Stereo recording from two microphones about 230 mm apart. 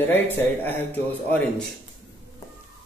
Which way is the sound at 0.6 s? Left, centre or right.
Centre.